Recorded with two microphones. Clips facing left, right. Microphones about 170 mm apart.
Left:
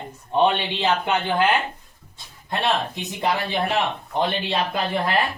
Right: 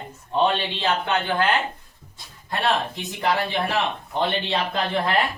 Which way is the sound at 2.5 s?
20° left (ahead or behind).